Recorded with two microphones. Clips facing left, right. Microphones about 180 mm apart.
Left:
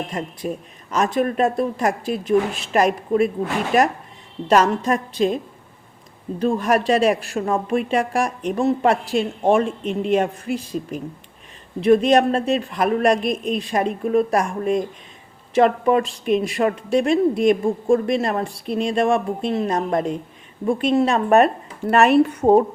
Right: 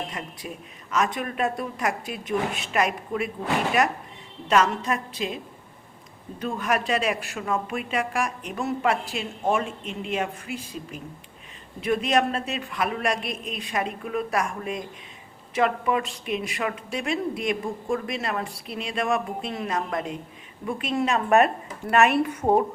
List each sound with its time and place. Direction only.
0.1 s speech: 40° left (ahead or behind)
6.4 s speech: 35° left (ahead or behind)